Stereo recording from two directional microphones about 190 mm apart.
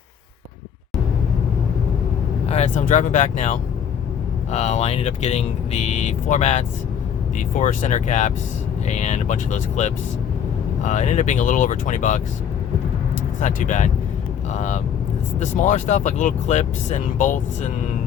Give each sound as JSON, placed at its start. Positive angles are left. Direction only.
{"t": 2.5, "sound": "speech", "side_deg": 35}
{"t": 13.4, "sound": "speech", "side_deg": 40}